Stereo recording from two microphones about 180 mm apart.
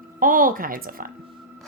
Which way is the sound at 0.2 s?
50° right (ahead or behind).